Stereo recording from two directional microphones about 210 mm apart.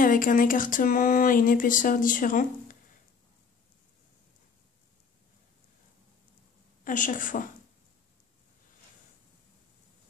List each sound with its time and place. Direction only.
0.0 s speech: 40° left (ahead or behind)
6.8 s a woman's voice: 40° left (ahead or behind)